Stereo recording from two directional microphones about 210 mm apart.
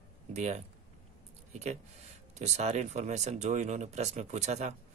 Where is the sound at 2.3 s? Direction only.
30° right (ahead or behind).